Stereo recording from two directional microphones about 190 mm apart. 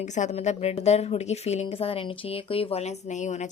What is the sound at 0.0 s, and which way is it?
A woman's voice, 40° left (ahead or behind).